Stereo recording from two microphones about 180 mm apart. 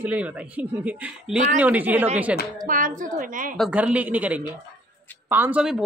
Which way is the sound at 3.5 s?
5° right (ahead or behind).